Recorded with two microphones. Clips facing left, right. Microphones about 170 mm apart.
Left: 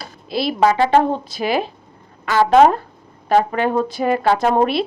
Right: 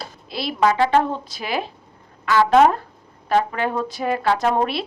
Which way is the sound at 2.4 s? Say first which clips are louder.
Left 3 dB; 30° left (ahead or behind).